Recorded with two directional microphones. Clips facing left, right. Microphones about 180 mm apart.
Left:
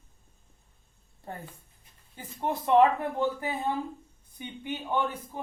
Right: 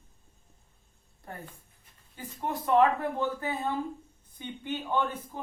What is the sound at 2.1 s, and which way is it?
Speech, 25° left (ahead or behind).